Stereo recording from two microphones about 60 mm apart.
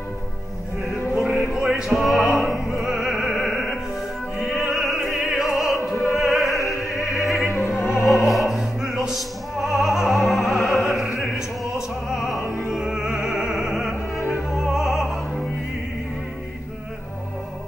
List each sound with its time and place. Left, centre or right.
1.1 s music: centre
2.3 s opera: centre
2.8 s music: centre
4.4 s opera: centre
6.5 s opera: left
7.0 s opera: centre
11.1 s music: centre
13.5 s opera: centre